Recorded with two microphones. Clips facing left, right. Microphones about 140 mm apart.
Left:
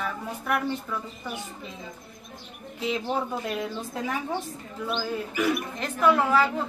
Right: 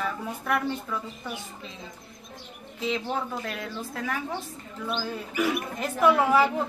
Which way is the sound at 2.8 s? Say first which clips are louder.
Left 1 dB; 15° left (ahead or behind).